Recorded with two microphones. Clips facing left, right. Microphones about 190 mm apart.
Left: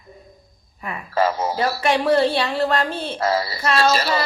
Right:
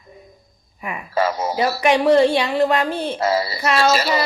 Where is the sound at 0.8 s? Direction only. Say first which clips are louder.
Even; 15° right (ahead or behind).